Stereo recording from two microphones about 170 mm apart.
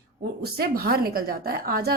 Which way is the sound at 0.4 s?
65° right (ahead or behind).